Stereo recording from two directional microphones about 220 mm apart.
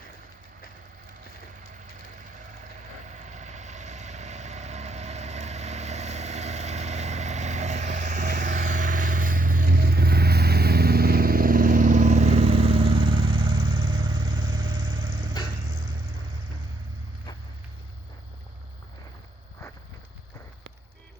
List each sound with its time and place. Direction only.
3.1 s vehicle: 30° right (ahead or behind)